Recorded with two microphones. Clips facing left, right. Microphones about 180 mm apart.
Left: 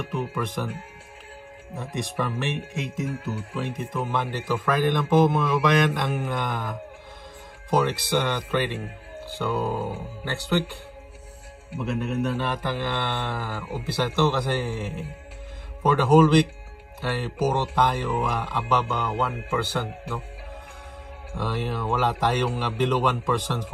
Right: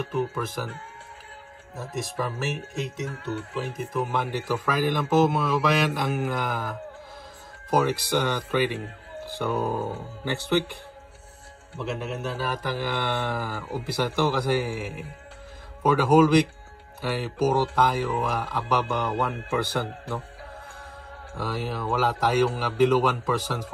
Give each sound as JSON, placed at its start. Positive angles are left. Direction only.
{"t": 0.0, "sound": "speech", "side_deg": -5}
{"t": 1.8, "sound": "a man's voice", "side_deg": 0}
{"t": 12.0, "sound": "a man's voice", "side_deg": -5}
{"t": 21.4, "sound": "a man's voice", "side_deg": -5}